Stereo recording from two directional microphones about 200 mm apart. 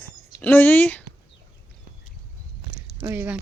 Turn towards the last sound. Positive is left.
turn(degrees=-10)  # may be behind; listen again after turning